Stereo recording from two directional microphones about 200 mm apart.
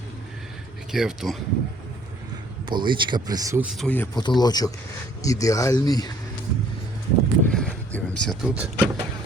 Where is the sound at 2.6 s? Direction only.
25° right (ahead or behind).